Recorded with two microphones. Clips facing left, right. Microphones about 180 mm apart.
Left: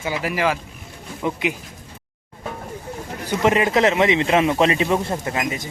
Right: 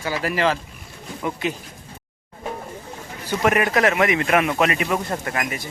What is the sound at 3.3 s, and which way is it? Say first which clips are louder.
A man's voice: left 2 dB; 20° left (ahead or behind).